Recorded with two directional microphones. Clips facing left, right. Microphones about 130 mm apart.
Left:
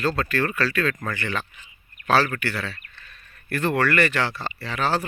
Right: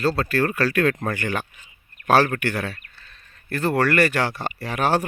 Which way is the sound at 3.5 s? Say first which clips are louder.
Right 2 dB; 35° right (ahead or behind).